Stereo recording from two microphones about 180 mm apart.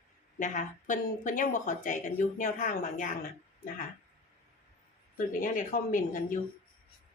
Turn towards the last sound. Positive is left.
turn(degrees=50)  # may be behind; listen again after turning